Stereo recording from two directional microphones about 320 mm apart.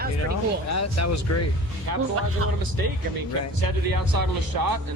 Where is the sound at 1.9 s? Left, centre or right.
Right.